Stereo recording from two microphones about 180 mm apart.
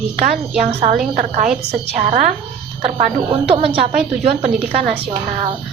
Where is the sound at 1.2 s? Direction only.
45° right (ahead or behind).